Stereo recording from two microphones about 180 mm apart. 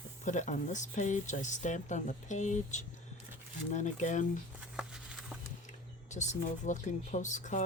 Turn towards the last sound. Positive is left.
turn(degrees=40)  # may be behind; listen again after turning